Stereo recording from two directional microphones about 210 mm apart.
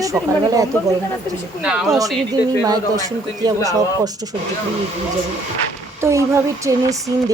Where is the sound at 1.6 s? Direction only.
5° right (ahead or behind).